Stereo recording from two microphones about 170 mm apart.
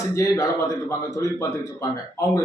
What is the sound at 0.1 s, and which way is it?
Speech, 20° left (ahead or behind).